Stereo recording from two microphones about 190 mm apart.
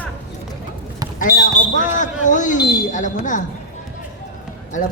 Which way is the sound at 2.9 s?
40° left (ahead or behind).